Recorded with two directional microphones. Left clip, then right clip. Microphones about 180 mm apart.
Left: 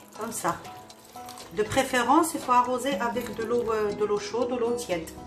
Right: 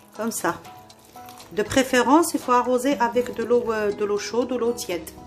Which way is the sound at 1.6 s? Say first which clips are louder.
Right 4 dB; 65° right (ahead or behind).